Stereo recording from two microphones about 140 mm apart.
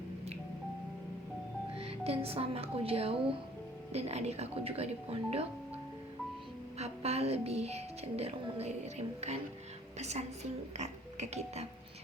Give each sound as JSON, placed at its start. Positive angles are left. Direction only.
{"t": 1.7, "sound": "speech", "side_deg": -45}
{"t": 6.7, "sound": "speech", "side_deg": -50}
{"t": 10.8, "sound": "music", "side_deg": -55}